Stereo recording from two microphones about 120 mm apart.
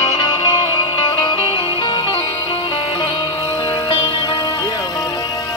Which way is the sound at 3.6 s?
40° left (ahead or behind).